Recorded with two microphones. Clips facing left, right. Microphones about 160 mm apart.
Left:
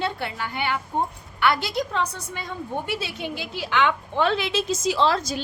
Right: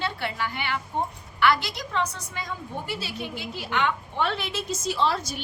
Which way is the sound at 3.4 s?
90° left.